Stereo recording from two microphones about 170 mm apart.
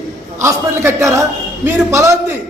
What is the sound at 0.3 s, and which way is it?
A man's voice, 15° right (ahead or behind).